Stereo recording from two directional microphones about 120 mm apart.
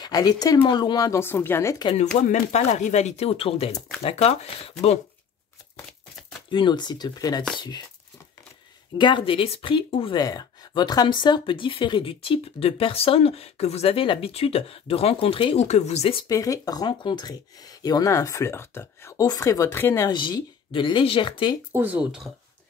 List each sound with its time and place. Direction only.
0.0 s speech: 35° left (ahead or behind)
1.2 s speech: 20° left (ahead or behind)
2.2 s speech: 80° left; by 4.9 s 55° left (ahead or behind)
6.5 s speech: 40° left (ahead or behind)
8.9 s speech: 40° left (ahead or behind)
16.3 s speech: 30° left (ahead or behind)
20.1 s speech: 40° left (ahead or behind)
21.7 s speech: 15° right (ahead or behind)